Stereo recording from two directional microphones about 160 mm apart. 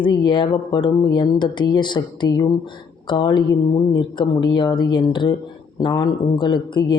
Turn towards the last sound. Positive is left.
turn(degrees=25)  # may be behind; listen again after turning